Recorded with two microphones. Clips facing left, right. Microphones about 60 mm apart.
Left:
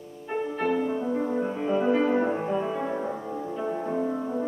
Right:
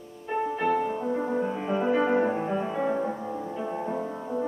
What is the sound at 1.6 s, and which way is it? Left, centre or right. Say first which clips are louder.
Music: left 2 dB; centre.